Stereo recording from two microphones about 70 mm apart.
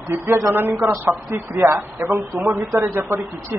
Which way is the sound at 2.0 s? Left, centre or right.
Right.